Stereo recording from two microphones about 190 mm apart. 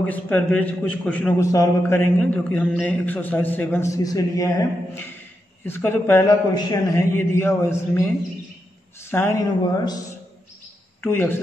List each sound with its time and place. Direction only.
0.1 s a man's voice: 5° left (ahead or behind)
9.1 s a man's voice: 15° left (ahead or behind)